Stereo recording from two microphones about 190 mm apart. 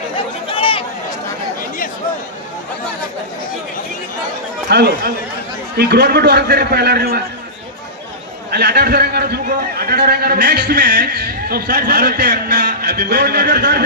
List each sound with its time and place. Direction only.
0.5 s chatter: 25° left (ahead or behind)
4.7 s a man's voice: 60° right (ahead or behind)
8.4 s a man's voice: 60° right (ahead or behind)